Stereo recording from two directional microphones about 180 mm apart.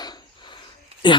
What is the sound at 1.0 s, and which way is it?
Speech, 25° left (ahead or behind).